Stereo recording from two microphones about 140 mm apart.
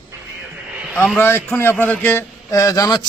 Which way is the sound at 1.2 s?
15° left (ahead or behind).